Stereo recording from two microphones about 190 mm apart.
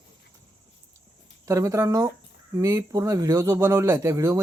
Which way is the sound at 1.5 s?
15° right (ahead or behind).